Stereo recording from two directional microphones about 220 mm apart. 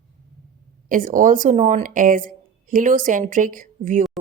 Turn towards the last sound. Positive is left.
turn(degrees=-35)  # may be behind; listen again after turning